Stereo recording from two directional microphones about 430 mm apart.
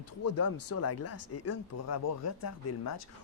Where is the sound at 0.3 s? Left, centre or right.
Left.